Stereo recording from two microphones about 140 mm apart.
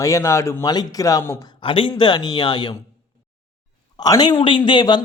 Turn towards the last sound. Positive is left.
turn(degrees=35)  # may be behind; listen again after turning